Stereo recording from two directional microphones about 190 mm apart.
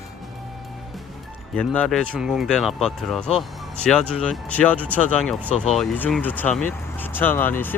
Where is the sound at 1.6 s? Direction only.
5° left (ahead or behind).